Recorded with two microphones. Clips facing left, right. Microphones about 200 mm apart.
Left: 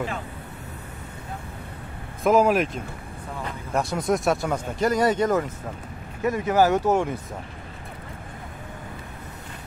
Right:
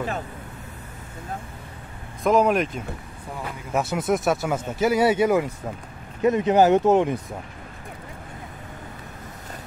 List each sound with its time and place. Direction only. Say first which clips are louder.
2.2 s speech: even; 5° left (ahead or behind)
6.2 s speech: right 3 dB; 20° right (ahead or behind)